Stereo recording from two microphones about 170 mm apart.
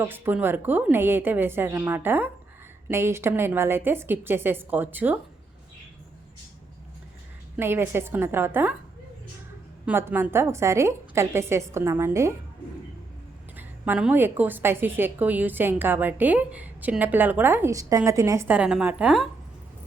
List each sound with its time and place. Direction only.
0.0 s a woman's voice: 10° right (ahead or behind)
7.5 s a woman's voice: 15° right (ahead or behind)
9.8 s a woman's voice: 10° right (ahead or behind)
13.6 s a woman's voice: 10° right (ahead or behind)